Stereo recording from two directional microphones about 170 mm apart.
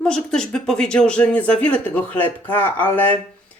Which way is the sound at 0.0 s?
5° left (ahead or behind).